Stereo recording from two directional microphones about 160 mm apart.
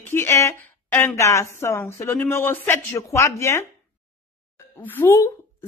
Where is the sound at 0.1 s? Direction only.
15° left (ahead or behind).